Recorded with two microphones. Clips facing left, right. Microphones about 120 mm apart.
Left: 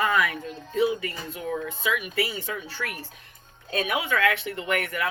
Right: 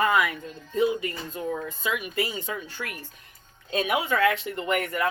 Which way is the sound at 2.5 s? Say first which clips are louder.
Even; 25° right (ahead or behind).